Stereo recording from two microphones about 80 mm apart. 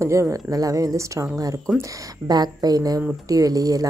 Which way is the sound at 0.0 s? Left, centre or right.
Right.